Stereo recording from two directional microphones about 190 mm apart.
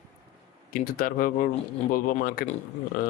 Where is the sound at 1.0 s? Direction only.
45° left (ahead or behind).